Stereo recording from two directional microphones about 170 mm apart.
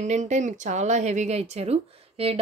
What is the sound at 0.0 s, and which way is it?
Speech, 45° right (ahead or behind).